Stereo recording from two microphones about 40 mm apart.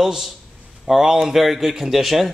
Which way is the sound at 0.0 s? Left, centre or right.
Centre.